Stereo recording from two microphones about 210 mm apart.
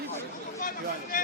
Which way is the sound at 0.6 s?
40° left (ahead or behind).